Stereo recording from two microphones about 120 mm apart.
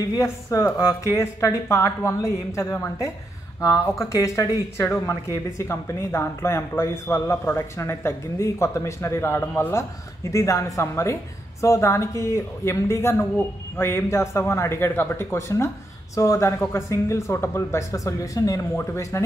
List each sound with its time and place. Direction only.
0.0 s speech: 30° left (ahead or behind)
4.1 s speech: 25° left (ahead or behind)